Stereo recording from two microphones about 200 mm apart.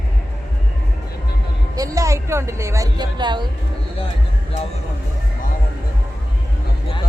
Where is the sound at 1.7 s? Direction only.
15° right (ahead or behind).